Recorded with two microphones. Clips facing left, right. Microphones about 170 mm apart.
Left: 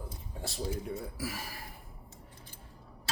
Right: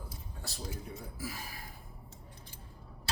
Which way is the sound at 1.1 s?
80° left.